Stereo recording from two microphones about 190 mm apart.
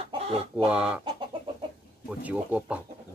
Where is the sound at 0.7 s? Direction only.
5° right (ahead or behind).